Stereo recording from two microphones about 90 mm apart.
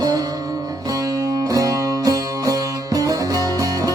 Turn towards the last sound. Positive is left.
turn(degrees=-40)  # may be behind; listen again after turning